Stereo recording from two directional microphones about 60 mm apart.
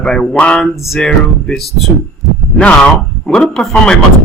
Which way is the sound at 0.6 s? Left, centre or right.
Centre.